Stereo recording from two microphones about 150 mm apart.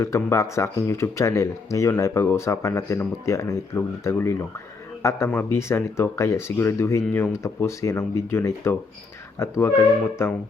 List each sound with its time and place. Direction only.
0.0 s speech: 20° left (ahead or behind)